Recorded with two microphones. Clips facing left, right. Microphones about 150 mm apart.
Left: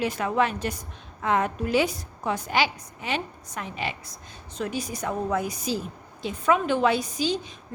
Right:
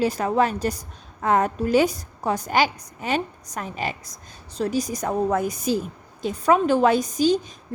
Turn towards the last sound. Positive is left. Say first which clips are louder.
# right 7 dB
turn(degrees=-45)  # may be behind; listen again after turning